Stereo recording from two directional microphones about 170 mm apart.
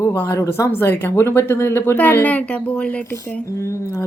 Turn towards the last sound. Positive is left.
turn(degrees=15)  # may be behind; listen again after turning